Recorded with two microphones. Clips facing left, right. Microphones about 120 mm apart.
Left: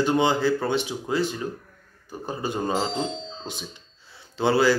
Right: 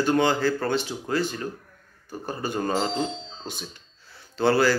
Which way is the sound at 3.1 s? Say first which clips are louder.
Left 2 dB; 20° left (ahead or behind).